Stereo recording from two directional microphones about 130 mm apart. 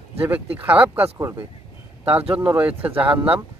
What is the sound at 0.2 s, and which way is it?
Speech, 15° right (ahead or behind).